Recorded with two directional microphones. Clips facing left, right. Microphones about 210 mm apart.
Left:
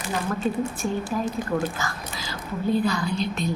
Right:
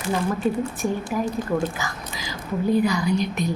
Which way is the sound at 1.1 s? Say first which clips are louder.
Right 2 dB; 10° right (ahead or behind).